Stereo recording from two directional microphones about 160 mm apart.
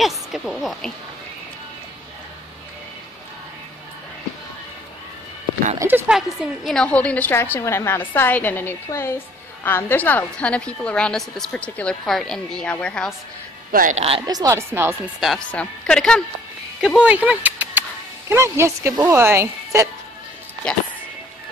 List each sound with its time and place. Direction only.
0.0 s speech: centre (ahead or behind)
5.8 s speech: 15° right (ahead or behind)
6.1 s a woman's voice: centre (ahead or behind)
13.7 s speech: 60° right (ahead or behind)
13.9 s speech: 40° right (ahead or behind)
14.2 s speech: 25° right (ahead or behind)
15.1 s a woman's voice: centre (ahead or behind); by 19.9 s 20° right (ahead or behind)